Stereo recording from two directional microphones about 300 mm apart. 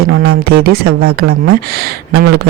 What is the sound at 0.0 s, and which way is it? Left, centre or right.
A man's voice, right.